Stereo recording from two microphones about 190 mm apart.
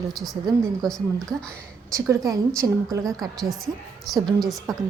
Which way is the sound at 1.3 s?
20° right (ahead or behind).